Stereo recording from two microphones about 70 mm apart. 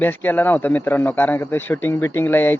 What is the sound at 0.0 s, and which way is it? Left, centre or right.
Speech, left.